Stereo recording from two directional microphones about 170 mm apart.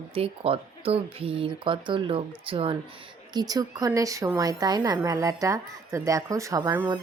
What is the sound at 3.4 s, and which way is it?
A woman's voice, 20° right (ahead or behind).